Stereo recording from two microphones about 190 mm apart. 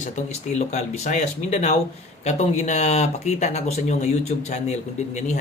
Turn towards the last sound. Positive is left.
turn(degrees=40)  # may be behind; listen again after turning